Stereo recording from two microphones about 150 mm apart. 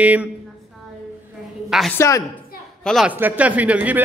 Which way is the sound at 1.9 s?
20° left (ahead or behind).